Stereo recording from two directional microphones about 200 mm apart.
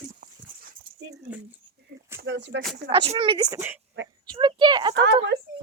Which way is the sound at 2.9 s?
25° right (ahead or behind).